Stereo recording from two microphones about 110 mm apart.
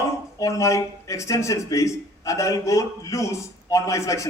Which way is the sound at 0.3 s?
30° left (ahead or behind).